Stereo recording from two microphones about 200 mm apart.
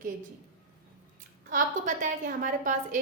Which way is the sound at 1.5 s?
40° right (ahead or behind).